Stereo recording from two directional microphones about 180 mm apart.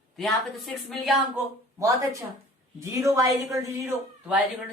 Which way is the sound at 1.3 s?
15° right (ahead or behind).